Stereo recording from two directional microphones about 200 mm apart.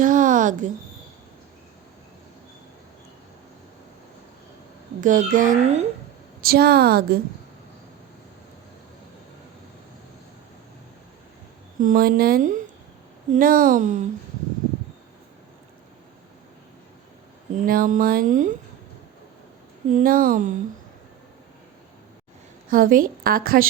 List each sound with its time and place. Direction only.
0.0 s a sound: 40° right (ahead or behind)
4.9 s speech: 40° right (ahead or behind)
6.4 s a woman's voice: 50° right (ahead or behind)
11.8 s a woman's voice: 45° right (ahead or behind)
17.7 s a woman's voice: 45° right (ahead or behind)
19.9 s a woman's voice: 45° right (ahead or behind)
22.7 s a woman's voice: 45° right (ahead or behind)